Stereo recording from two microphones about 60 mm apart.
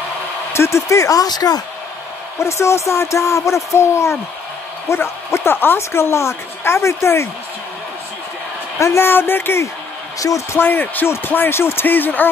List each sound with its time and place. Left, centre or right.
0.5 s speech: left
2.3 s a woman's voice: left
8.7 s a woman's voice: left
9.0 s speech: left
10.1 s speech: left
10.5 s speech: left